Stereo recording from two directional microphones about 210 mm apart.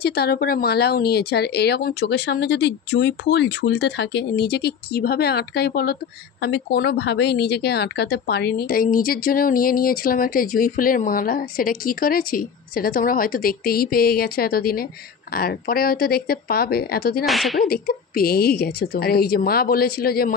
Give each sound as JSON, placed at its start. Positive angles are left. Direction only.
{"t": 0.0, "sound": "a woman's voice", "side_deg": 50}
{"t": 17.3, "sound": "speech", "side_deg": 0}
{"t": 17.6, "sound": "a woman's voice", "side_deg": 45}